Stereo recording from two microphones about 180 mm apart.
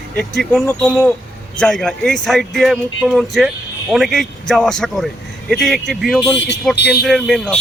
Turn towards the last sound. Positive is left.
turn(degrees=5)  # may be behind; listen again after turning